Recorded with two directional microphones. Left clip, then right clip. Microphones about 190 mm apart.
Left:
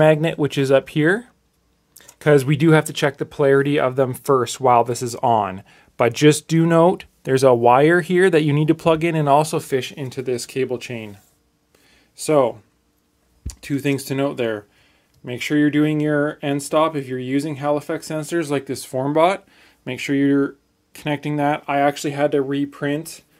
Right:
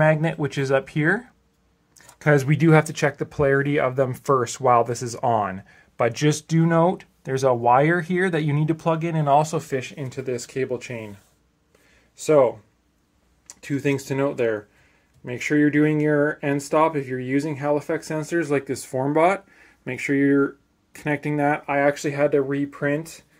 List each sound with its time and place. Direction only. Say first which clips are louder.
0.0 s speech: left 5 dB; 30° left (ahead or behind)
12.3 s speech: even; 30° left (ahead or behind)
17.8 s speech: left 1 dB; 15° left (ahead or behind)